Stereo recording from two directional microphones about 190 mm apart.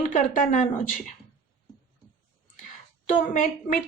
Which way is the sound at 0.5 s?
40° left (ahead or behind).